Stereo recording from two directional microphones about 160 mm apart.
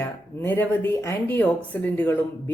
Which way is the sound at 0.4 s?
15° left (ahead or behind).